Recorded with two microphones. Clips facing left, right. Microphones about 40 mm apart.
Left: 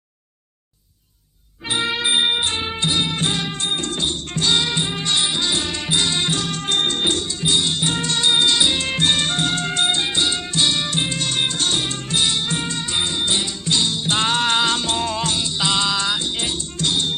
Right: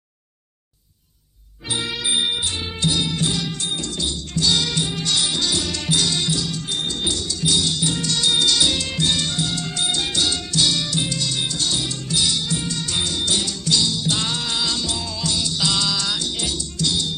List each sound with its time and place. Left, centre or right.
1.7 s music: left